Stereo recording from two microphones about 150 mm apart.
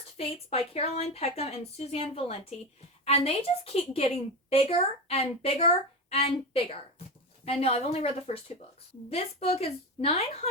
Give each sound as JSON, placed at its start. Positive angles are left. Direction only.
{"t": 0.2, "sound": "a woman's voice", "side_deg": 40}